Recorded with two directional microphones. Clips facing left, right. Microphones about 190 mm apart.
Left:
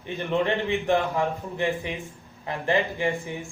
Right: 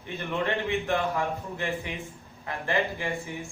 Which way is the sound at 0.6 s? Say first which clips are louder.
Left 3 dB; 15° left (ahead or behind).